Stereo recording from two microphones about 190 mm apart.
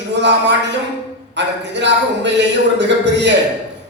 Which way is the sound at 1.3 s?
65° right (ahead or behind).